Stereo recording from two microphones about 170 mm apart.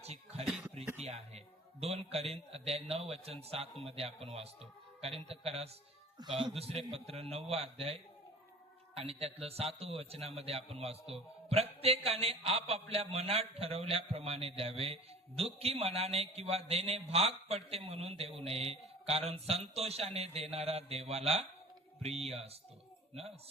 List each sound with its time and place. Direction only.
0.0 s speech: 40° right (ahead or behind)
0.4 s a sound: centre (ahead or behind)
0.9 s a man's voice: 40° right (ahead or behind)
9.0 s a man's voice: 35° right (ahead or behind)